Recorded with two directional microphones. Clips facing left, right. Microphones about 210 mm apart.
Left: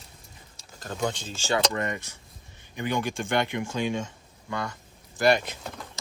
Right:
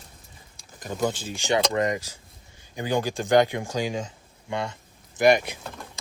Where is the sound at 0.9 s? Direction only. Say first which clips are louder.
Right 3 dB; 5° right (ahead or behind).